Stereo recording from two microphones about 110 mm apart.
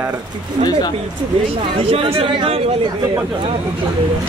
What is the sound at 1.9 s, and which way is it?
Speech, 55° right (ahead or behind).